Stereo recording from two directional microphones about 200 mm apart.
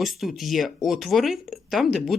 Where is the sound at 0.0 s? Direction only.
Centre (ahead or behind).